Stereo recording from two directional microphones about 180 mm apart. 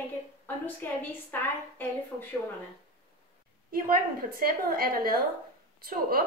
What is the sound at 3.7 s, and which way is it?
A woman's voice, 55° right (ahead or behind).